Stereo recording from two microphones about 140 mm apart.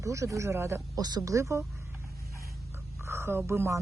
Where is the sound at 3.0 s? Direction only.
20° right (ahead or behind).